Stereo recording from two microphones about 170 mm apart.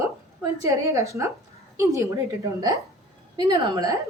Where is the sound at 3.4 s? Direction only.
25° right (ahead or behind).